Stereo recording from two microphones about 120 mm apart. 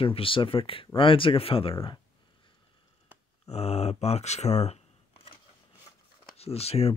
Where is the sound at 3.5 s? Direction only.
60° left (ahead or behind).